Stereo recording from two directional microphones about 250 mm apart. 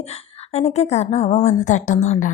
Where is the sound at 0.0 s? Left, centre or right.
Left.